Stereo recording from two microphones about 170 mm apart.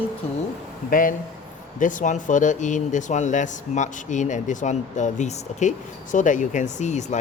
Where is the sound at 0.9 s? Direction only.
55° left (ahead or behind).